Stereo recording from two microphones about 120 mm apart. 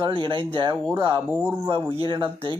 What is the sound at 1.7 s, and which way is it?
Speech, 50° right (ahead or behind).